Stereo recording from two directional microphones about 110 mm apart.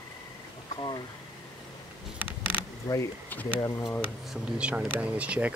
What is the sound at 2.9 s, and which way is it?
Speech, 30° left (ahead or behind).